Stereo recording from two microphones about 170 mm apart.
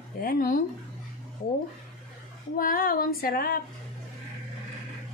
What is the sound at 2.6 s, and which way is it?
Speech, 55° left (ahead or behind).